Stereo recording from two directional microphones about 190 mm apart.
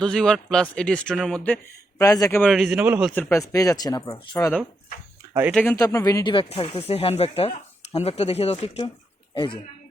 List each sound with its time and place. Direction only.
0.0 s speech: 5° left (ahead or behind)
2.0 s speech: 20° left (ahead or behind)
2.4 s speech: centre (ahead or behind)
3.2 s speech: 10° left (ahead or behind)
5.7 s speech: 15° left (ahead or behind)